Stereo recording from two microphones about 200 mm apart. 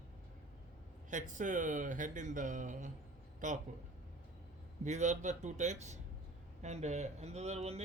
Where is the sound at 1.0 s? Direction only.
40° right (ahead or behind).